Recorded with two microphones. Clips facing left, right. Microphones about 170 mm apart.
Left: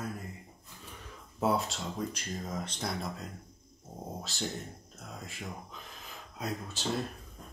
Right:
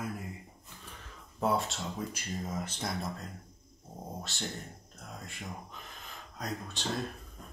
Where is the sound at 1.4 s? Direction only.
Centre (ahead or behind).